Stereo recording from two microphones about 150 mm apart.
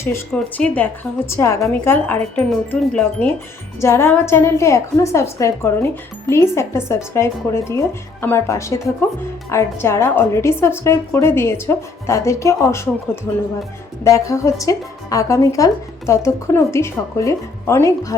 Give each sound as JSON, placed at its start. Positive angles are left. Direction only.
{"t": 0.0, "sound": "a woman's voice", "side_deg": 15}
{"t": 3.8, "sound": "a woman's voice", "side_deg": 20}
{"t": 14.0, "sound": "speech", "side_deg": 20}